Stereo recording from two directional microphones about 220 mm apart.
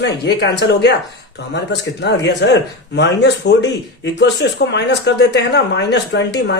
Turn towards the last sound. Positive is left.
turn(degrees=50)  # may be behind; listen again after turning